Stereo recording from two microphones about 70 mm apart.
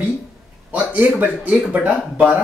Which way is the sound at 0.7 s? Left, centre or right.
Right.